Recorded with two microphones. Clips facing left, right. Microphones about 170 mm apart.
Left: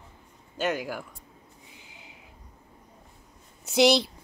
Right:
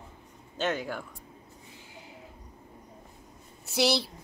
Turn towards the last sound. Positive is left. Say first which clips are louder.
# left 6 dB
turn(degrees=20)  # may be behind; listen again after turning